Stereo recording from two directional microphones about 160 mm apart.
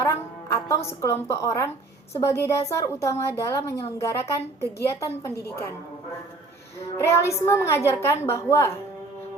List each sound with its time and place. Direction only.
0.0 s music: 20° left (ahead or behind)
0.9 s a woman's voice: 15° left (ahead or behind)
6.7 s a woman's voice: 15° left (ahead or behind)